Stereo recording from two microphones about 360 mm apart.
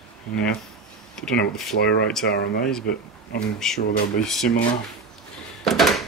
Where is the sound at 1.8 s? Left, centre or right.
Left.